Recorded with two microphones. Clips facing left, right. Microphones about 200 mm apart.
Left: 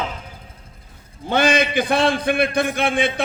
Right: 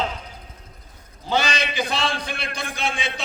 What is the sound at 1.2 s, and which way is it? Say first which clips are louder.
A man's voice: left 6 dB; 55° left (ahead or behind).